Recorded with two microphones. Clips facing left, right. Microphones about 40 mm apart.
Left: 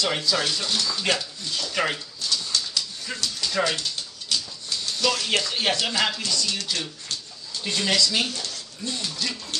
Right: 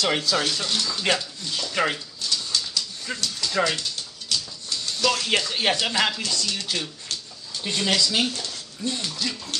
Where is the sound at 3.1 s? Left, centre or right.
Centre.